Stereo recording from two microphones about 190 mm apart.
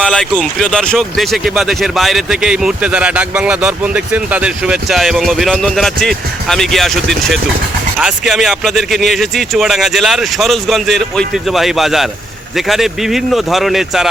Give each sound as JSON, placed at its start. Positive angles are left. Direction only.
{"t": 0.0, "sound": "speech", "side_deg": 5}